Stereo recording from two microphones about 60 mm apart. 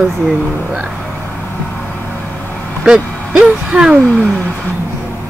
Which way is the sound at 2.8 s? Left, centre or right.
Centre.